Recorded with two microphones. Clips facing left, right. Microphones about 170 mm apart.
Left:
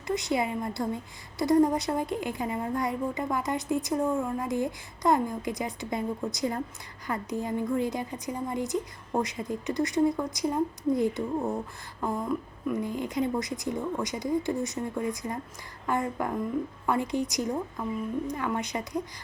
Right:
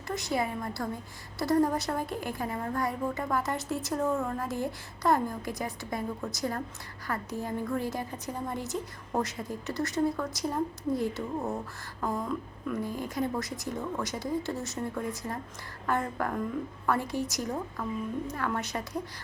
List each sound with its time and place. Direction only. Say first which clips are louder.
0.1 s a woman's voice: left 3 dB; 20° left (ahead or behind)